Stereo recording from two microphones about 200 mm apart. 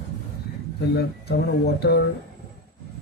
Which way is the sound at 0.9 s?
55° left (ahead or behind).